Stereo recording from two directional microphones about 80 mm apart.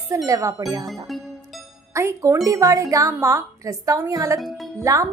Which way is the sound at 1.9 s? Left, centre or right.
Right.